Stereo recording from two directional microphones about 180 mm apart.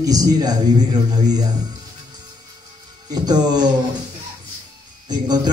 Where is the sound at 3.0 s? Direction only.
20° right (ahead or behind).